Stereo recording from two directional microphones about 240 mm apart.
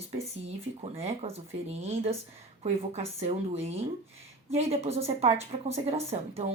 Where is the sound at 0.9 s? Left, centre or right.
Right.